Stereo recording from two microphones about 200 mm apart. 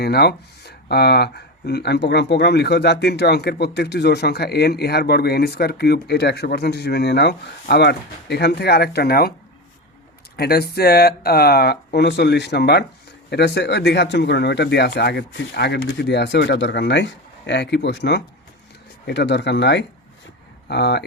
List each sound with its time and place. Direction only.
0.0 s speech: 55° left (ahead or behind)
10.3 s speech: 50° left (ahead or behind)